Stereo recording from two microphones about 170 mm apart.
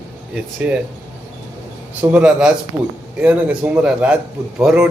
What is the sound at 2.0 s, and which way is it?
A man's voice, 10° right (ahead or behind).